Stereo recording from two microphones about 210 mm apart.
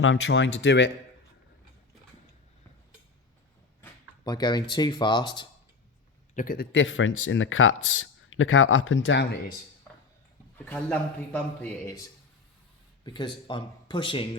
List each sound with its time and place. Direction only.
0.0 s speech: 65° left (ahead or behind)
3.8 s a sound: 15° left (ahead or behind)
4.7 s speech: 20° left (ahead or behind)
6.3 s a man's voice: 40° left (ahead or behind)
6.7 s speech: 65° left (ahead or behind)
10.7 s a man's voice: 5° left (ahead or behind); by 14.3 s 25° left (ahead or behind)